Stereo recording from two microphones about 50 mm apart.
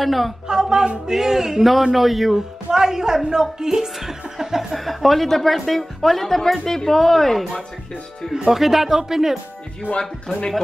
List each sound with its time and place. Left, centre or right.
0.0 s a woman's voice: centre
0.5 s a man's voice: centre
4.7 s a woman's voice: centre
8.5 s a man's voice: centre
9.9 s speech: centre